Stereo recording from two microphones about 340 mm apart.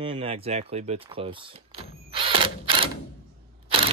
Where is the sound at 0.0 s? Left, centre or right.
Centre.